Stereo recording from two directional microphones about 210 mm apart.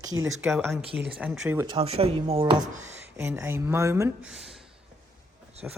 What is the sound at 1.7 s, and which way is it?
Speech, 30° right (ahead or behind).